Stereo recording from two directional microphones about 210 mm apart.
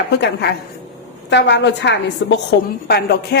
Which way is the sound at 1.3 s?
55° left (ahead or behind).